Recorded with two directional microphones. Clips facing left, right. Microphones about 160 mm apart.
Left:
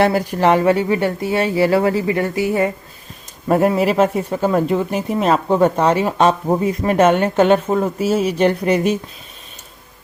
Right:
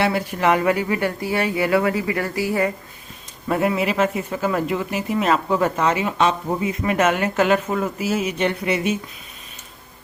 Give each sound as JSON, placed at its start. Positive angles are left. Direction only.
{"t": 0.0, "sound": "speech", "side_deg": 40}
{"t": 3.5, "sound": "speech", "side_deg": 40}